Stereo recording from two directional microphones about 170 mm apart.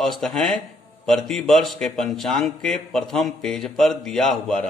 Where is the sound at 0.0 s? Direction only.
5° left (ahead or behind).